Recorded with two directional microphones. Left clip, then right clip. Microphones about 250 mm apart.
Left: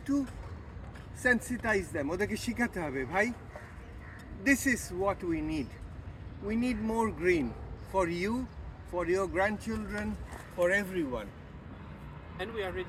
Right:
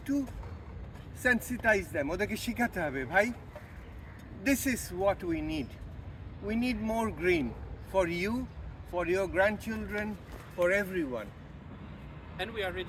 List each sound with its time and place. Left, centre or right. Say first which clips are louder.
0.0 s speech: left 1 dB; centre
4.4 s speech: left 3 dB; centre
10.6 s speech: even; left
12.4 s speech: right 1 dB; right